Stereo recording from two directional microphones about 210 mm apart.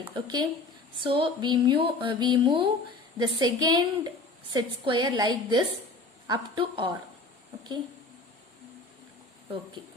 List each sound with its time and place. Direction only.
0.1 s speech: 20° right (ahead or behind)